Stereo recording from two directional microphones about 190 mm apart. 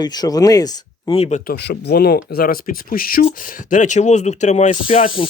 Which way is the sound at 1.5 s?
60° left (ahead or behind).